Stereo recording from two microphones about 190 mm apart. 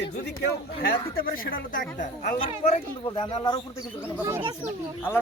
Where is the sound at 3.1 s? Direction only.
25° left (ahead or behind).